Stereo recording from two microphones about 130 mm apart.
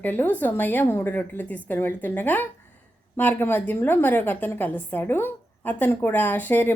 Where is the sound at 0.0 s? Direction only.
15° left (ahead or behind).